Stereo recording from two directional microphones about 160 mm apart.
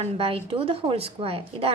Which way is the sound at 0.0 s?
35° right (ahead or behind).